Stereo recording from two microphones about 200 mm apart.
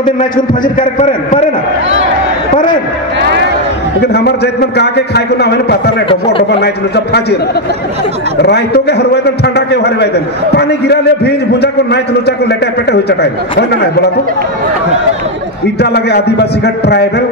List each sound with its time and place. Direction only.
0.7 s a man's voice: 35° left (ahead or behind)
2.5 s a man's voice: 20° left (ahead or behind)
4.1 s a man's voice: 55° left (ahead or behind)
8.4 s a man's voice: 55° left (ahead or behind)
15.8 s a man's voice: 55° left (ahead or behind)